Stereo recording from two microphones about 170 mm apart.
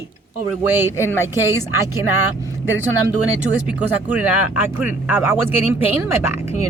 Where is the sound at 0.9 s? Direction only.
15° left (ahead or behind).